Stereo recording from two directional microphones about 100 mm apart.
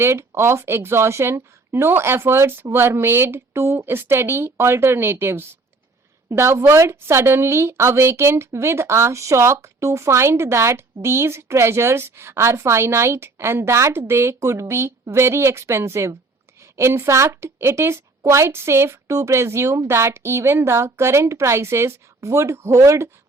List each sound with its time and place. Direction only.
0.0 s a woman's voice: 25° right (ahead or behind)